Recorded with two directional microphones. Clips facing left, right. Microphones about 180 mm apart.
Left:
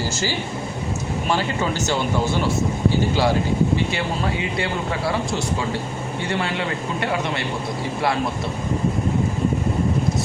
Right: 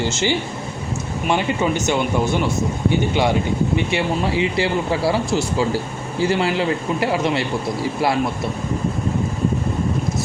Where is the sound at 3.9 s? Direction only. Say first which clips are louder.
Right 4 dB; 25° right (ahead or behind).